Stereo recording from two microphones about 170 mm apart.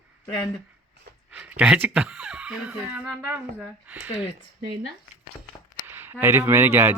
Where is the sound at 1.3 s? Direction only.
5° right (ahead or behind).